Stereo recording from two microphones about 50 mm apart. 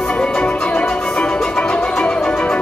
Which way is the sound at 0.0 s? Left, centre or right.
Centre.